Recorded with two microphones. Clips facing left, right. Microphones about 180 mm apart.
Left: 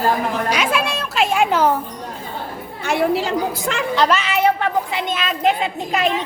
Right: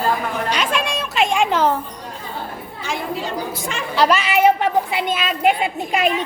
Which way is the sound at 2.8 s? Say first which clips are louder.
Left 7 dB; 65° left (ahead or behind).